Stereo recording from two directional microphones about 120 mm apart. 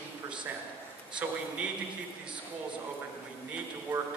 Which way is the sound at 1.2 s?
15° right (ahead or behind).